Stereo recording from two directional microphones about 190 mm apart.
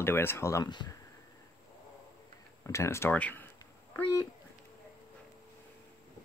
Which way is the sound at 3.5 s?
20° left (ahead or behind).